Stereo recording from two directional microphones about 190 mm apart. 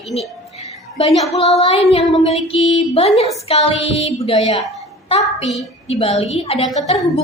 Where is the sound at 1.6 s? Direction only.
30° left (ahead or behind).